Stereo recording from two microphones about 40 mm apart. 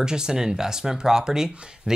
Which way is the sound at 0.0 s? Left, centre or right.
Centre.